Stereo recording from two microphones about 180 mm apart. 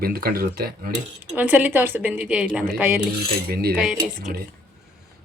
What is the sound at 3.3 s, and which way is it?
Speech, 55° right (ahead or behind).